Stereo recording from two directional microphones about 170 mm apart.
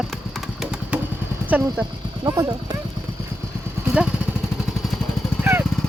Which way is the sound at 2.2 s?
20° right (ahead or behind).